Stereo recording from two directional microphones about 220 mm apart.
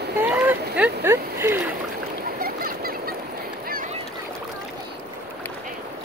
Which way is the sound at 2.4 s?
45° right (ahead or behind).